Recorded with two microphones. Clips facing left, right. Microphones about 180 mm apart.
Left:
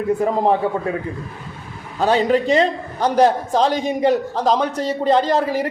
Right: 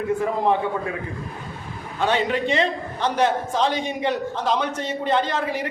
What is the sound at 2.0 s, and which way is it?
A man's voice, 35° left (ahead or behind).